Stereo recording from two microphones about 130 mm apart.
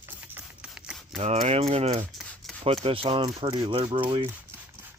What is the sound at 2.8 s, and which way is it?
Speech, 45° right (ahead or behind).